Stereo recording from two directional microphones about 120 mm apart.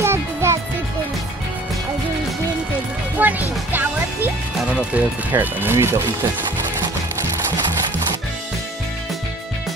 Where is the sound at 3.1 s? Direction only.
15° right (ahead or behind).